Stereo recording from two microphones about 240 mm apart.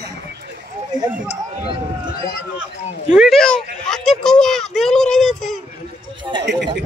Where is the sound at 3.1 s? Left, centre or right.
Centre.